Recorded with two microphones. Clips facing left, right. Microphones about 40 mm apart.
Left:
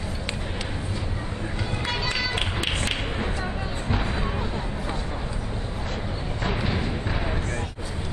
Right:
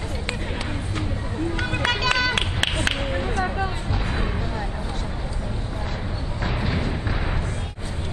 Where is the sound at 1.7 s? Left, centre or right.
Right.